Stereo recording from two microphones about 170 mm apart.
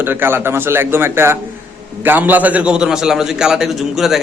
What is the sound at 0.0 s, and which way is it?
A man's voice, 10° right (ahead or behind).